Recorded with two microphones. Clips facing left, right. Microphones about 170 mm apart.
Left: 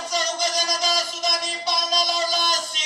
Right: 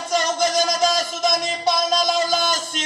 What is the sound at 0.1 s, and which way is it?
Music, 50° right (ahead or behind).